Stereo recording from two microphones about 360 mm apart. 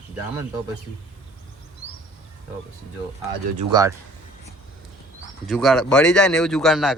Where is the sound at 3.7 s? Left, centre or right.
Centre.